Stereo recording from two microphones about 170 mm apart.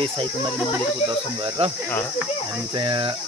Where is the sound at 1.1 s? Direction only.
30° right (ahead or behind).